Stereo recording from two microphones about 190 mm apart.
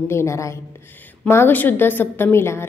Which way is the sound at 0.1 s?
15° left (ahead or behind).